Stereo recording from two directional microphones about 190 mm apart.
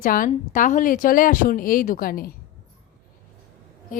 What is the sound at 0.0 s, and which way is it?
Speech, 45° left (ahead or behind).